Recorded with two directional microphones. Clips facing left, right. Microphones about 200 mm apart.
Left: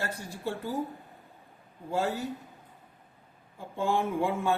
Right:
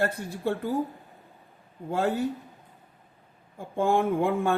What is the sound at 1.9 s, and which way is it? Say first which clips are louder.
Speech: right 4 dB; 55° right (ahead or behind).